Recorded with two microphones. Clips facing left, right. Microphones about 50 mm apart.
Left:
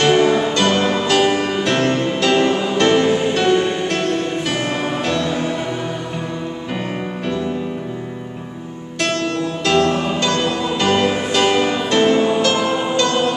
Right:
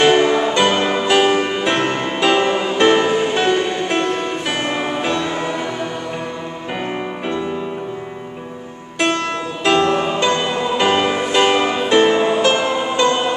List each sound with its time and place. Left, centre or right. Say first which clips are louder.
0.0 s music: right 1 dB; centre
9.7 s music: right 2 dB; centre